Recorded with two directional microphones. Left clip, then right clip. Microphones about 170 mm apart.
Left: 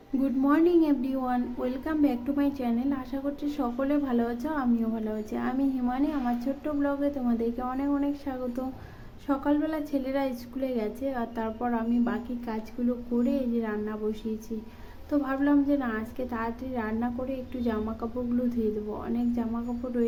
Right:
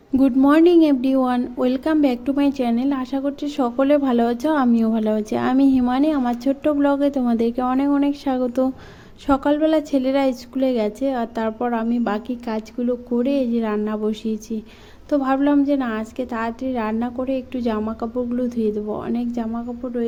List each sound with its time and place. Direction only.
0.2 s a woman's voice: 50° right (ahead or behind)